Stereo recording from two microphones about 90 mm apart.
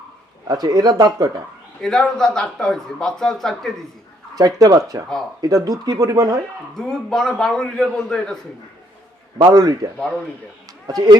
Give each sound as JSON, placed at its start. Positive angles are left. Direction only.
{"t": 0.4, "sound": "a man's voice", "side_deg": -50}
{"t": 1.8, "sound": "speech", "side_deg": 5}
{"t": 4.4, "sound": "a man's voice", "side_deg": -45}
{"t": 6.7, "sound": "a man's voice", "side_deg": 5}
{"t": 9.5, "sound": "a man's voice", "side_deg": -45}